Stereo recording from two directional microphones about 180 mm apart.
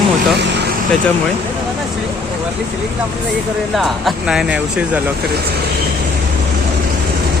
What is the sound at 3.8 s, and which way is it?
Speech, centre (ahead or behind).